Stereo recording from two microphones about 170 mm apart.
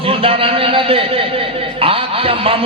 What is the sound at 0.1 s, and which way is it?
A man's voice, 35° right (ahead or behind).